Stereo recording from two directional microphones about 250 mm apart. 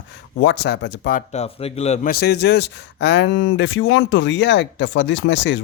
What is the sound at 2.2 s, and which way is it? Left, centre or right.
Speech, left.